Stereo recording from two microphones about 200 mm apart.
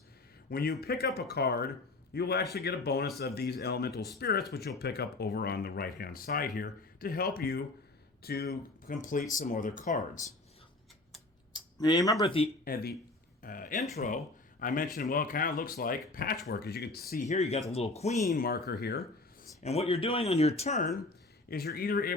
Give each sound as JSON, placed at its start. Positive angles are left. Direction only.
{"t": 0.5, "sound": "speech", "side_deg": 50}
{"t": 11.5, "sound": "a sound", "side_deg": 20}
{"t": 12.2, "sound": "speech", "side_deg": 30}
{"t": 12.6, "sound": "a man's voice", "side_deg": 50}
{"t": 17.2, "sound": "speech", "side_deg": 35}
{"t": 18.3, "sound": "speech", "side_deg": 45}
{"t": 19.6, "sound": "speech", "side_deg": 30}
{"t": 21.5, "sound": "speech", "side_deg": 50}